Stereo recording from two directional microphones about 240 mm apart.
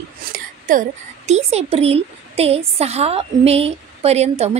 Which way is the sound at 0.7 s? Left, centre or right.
Right.